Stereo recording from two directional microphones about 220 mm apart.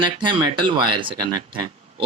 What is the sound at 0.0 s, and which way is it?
Speech, 20° right (ahead or behind).